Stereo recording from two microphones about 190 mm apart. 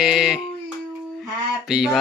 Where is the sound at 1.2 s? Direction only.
5° right (ahead or behind).